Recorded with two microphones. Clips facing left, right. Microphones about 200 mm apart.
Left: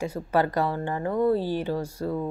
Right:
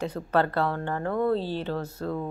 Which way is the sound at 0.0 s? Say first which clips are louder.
Left 1 dB; 10° left (ahead or behind).